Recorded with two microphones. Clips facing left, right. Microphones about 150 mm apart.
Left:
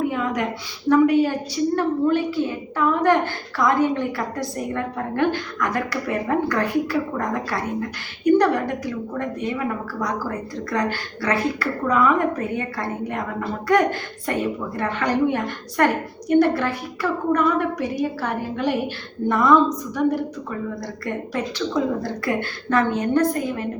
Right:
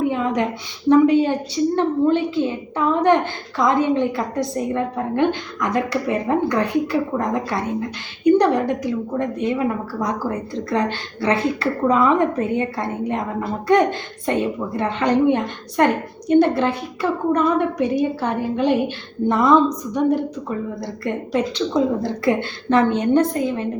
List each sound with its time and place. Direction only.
0.1 s a sound: 20° right (ahead or behind)
0.9 s a woman's voice: 20° right (ahead or behind)
14.3 s a woman's voice: 20° right (ahead or behind)
20.8 s a woman's voice: 20° right (ahead or behind)